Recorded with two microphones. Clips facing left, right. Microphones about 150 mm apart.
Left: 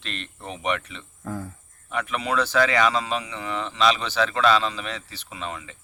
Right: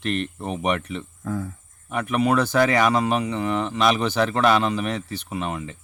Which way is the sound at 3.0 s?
55° right (ahead or behind).